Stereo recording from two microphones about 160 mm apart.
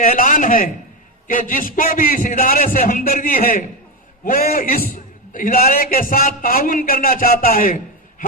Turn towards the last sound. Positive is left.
turn(degrees=60)  # may be behind; listen again after turning